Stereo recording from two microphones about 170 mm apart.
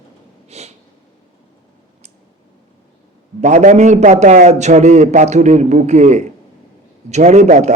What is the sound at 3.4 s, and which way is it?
A man's voice, 45° right (ahead or behind).